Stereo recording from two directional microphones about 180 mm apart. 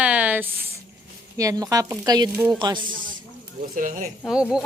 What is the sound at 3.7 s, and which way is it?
Speech, 50° right (ahead or behind).